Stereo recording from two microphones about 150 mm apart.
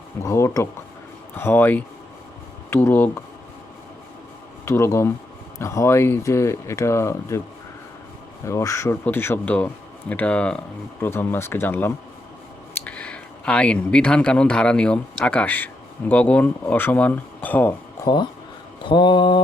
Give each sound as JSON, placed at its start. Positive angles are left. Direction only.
{"t": 0.2, "sound": "speech", "side_deg": 20}
{"t": 4.6, "sound": "speech", "side_deg": 20}
{"t": 8.4, "sound": "speech", "side_deg": 20}
{"t": 18.0, "sound": "speech", "side_deg": 30}
{"t": 18.8, "sound": "mantra", "side_deg": 30}